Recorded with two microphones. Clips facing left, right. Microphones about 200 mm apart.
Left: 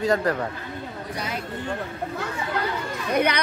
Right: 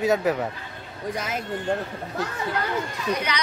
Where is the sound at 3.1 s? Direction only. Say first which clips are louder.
Left 5 dB; 55° left (ahead or behind).